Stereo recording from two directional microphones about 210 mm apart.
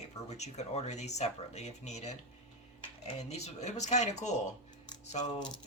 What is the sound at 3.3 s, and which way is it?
Speech, 35° left (ahead or behind).